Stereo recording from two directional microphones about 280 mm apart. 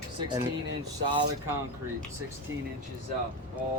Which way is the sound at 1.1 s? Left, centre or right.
Centre.